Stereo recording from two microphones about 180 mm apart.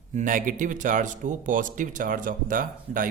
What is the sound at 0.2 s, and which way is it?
Speech, 50° right (ahead or behind).